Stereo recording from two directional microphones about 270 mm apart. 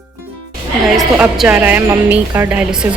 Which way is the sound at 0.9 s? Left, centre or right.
Centre.